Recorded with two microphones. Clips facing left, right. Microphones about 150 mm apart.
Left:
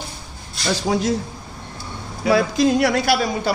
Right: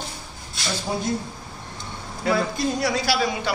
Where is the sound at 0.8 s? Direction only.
90° left.